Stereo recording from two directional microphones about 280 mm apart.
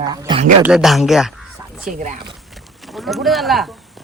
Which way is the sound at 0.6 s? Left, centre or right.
Centre.